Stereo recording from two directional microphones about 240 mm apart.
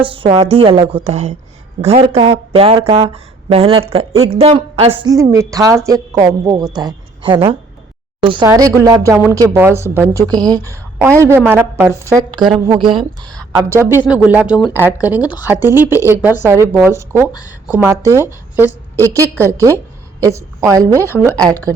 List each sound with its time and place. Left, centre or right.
0.0 s a woman's voice: right
5.1 s a woman's voice: centre
13.6 s a woman's voice: centre
20.9 s a woman's voice: centre
21.5 s a woman's voice: centre